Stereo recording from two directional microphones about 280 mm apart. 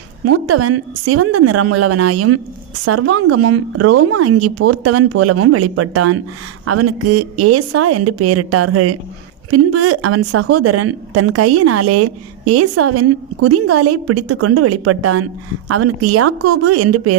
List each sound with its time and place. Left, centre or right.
0.3 s a woman's voice: right